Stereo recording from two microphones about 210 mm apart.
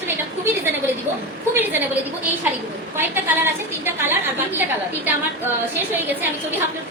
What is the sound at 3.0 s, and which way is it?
Speech, 10° right (ahead or behind).